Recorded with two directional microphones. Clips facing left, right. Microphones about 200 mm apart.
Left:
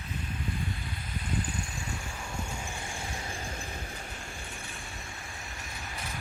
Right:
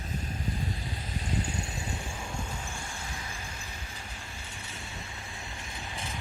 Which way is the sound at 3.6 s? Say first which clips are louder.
Left 5 dB; 55° left (ahead or behind).